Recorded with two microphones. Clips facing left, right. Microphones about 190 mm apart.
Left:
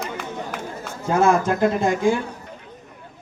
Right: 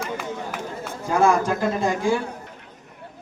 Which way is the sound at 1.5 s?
20° left (ahead or behind).